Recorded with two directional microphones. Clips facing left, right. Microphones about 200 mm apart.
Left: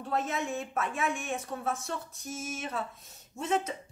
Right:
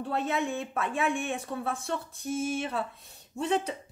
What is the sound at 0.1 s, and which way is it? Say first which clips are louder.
Speech: right 1 dB; 35° right (ahead or behind).